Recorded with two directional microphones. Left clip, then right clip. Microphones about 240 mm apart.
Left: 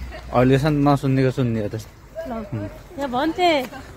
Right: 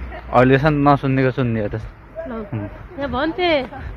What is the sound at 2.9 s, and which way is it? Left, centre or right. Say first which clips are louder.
Speech: right 1 dB; left.